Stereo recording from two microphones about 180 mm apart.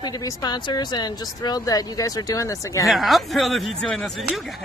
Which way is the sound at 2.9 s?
Centre (ahead or behind).